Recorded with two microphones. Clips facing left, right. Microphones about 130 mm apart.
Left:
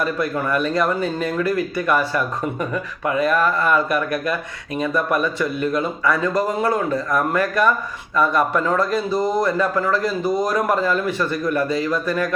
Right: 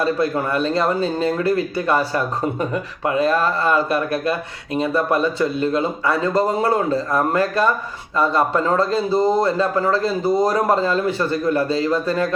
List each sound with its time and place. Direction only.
0.0 s speech: 30° right (ahead or behind)